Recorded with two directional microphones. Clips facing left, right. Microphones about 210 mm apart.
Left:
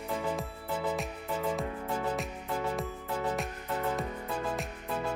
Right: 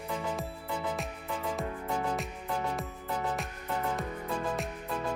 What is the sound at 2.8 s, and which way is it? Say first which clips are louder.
Music: left 1 dB; centre (ahead or behind).